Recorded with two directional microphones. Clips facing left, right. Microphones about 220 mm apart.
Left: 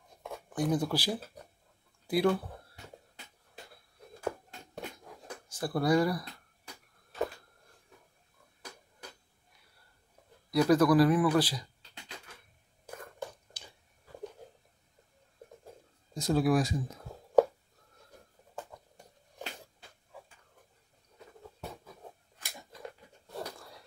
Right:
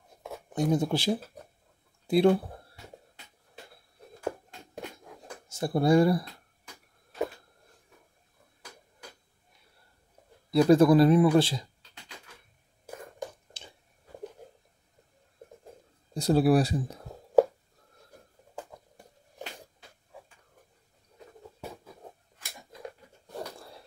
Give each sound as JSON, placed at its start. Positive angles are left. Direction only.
{"t": 0.5, "sound": "speech", "side_deg": -25}
{"t": 5.5, "sound": "speech", "side_deg": -25}
{"t": 10.5, "sound": "speech", "side_deg": -25}
{"t": 13.5, "sound": "a sound", "side_deg": -25}
{"t": 16.1, "sound": "speech", "side_deg": -35}